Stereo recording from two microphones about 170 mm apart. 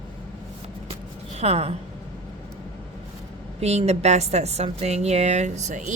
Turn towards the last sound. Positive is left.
turn(degrees=-45)  # may be behind; listen again after turning